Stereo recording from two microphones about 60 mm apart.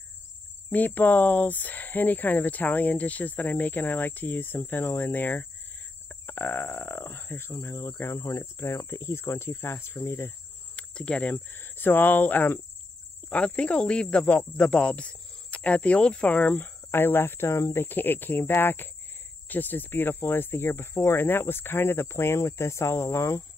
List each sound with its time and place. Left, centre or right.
0.7 s speech: left
6.0 s a sound: left
8.4 s speech: left
10.8 s speech: centre
11.3 s speech: left
17.8 s speech: left